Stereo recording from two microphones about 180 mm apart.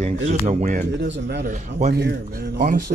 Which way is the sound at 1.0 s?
70° right (ahead or behind).